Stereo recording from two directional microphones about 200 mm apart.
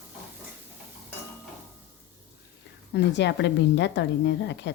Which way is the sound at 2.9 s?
60° left (ahead or behind).